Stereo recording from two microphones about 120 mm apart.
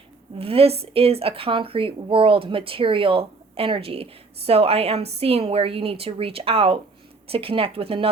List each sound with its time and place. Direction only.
0.3 s speech: 55° right (ahead or behind)